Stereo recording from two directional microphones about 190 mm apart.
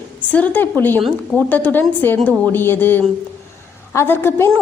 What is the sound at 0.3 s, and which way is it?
A woman's voice, 10° left (ahead or behind).